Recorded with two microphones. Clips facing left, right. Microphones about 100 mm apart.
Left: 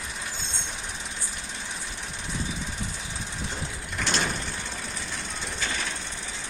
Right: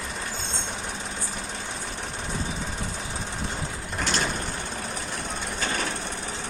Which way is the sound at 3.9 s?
40° right (ahead or behind).